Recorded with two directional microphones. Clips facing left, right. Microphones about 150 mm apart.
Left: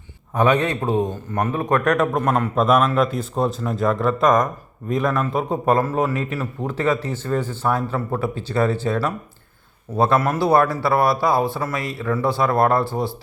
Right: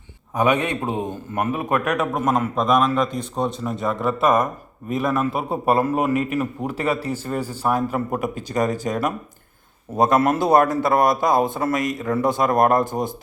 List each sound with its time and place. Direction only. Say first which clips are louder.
0.3 s a man's voice: left 2 dB; 15° right (ahead or behind)
1.4 s a man's voice: left 2 dB; 10° right (ahead or behind)